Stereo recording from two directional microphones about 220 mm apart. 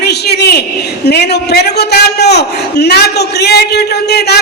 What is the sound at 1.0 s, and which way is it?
A man's voice, 50° left (ahead or behind).